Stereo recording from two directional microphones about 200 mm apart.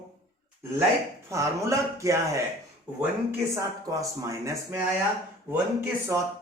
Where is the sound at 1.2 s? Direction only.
15° right (ahead or behind).